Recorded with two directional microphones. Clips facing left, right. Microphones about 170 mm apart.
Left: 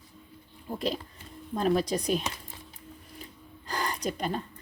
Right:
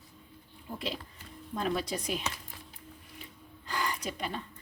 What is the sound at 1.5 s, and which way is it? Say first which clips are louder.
Speech: left 6 dB; 40° left (ahead or behind).